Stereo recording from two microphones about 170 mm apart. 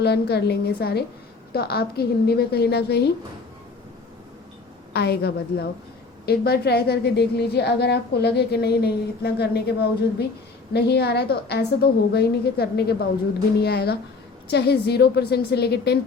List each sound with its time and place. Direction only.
0.0 s a woman's voice: 75° left (ahead or behind)
4.9 s a woman's voice: 75° left (ahead or behind)
10.8 s a woman's voice: 75° left (ahead or behind)